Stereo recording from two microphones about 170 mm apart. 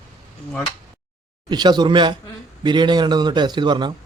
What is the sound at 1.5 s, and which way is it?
A man's voice, 25° right (ahead or behind).